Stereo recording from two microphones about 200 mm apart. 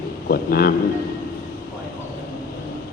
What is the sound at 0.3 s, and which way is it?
Speech, 50° left (ahead or behind).